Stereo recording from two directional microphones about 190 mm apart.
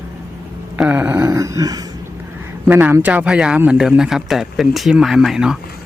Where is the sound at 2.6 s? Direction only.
10° right (ahead or behind).